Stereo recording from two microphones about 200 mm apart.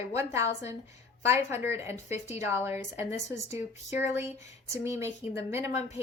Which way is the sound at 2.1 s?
35° left (ahead or behind).